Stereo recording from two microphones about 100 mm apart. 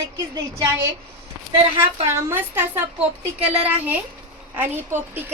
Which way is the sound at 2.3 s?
20° right (ahead or behind).